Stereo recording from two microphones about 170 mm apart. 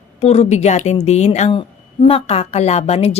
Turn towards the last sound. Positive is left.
turn(degrees=40)  # may be behind; listen again after turning